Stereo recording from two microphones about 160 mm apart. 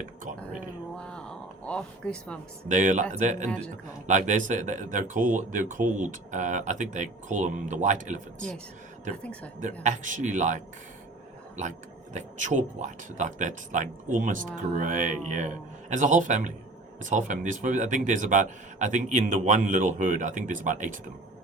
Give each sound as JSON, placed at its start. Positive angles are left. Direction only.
{"t": 0.9, "sound": "a sound", "side_deg": 5}
{"t": 1.6, "sound": "speech", "side_deg": 5}
{"t": 2.6, "sound": "speech", "side_deg": -55}
{"t": 9.2, "sound": "speech", "side_deg": 10}
{"t": 9.8, "sound": "speech", "side_deg": -50}
{"t": 12.1, "sound": "speech", "side_deg": -50}